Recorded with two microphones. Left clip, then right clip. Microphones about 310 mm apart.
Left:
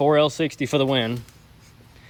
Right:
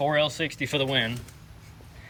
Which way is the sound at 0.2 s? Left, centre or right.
Left.